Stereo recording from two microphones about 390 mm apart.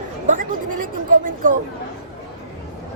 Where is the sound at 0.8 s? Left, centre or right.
Right.